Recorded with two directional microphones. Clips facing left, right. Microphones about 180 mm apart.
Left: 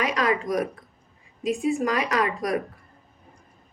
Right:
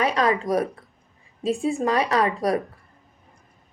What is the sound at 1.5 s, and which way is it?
Speech, 30° right (ahead or behind).